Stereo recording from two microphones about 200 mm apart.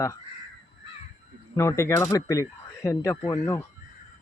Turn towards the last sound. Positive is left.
turn(degrees=15)  # may be behind; listen again after turning